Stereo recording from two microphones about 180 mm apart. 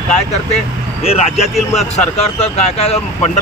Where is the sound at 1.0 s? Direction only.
35° left (ahead or behind).